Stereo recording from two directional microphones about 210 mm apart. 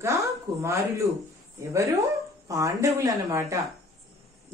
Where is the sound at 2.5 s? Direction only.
15° right (ahead or behind).